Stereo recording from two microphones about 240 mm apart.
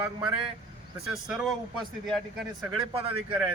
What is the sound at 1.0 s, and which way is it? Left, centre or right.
Speech, centre.